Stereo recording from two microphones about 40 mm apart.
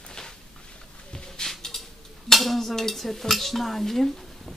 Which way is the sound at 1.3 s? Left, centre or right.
Centre.